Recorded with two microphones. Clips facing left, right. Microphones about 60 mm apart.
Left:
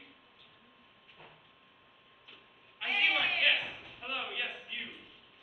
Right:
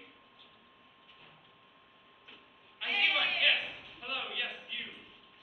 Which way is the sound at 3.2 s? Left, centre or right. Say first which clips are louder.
Even; centre.